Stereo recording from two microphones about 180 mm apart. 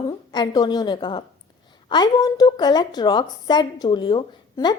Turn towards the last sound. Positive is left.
turn(degrees=25)  # may be behind; listen again after turning